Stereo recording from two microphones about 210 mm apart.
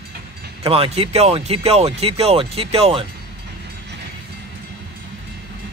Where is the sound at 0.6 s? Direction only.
25° right (ahead or behind).